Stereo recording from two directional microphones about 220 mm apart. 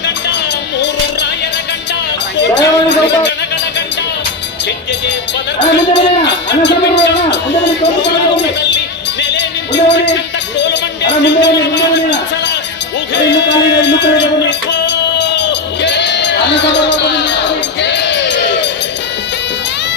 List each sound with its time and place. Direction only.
2.4 s a sound: 50° left (ahead or behind)
5.5 s speech: 55° left (ahead or behind)
9.3 s music: 55° left (ahead or behind)
10.6 s a man's voice: 55° left (ahead or behind)
13.1 s music: 55° left (ahead or behind)
15.8 s a sound: 55° left (ahead or behind)